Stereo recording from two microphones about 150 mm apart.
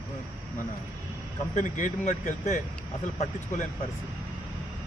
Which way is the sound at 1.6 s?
60° left (ahead or behind).